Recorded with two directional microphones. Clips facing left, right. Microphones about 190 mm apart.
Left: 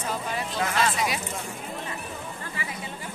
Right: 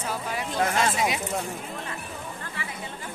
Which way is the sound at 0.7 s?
25° right (ahead or behind).